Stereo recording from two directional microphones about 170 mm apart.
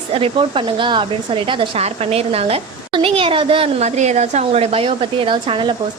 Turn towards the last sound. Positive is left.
turn(degrees=-30)  # may be behind; listen again after turning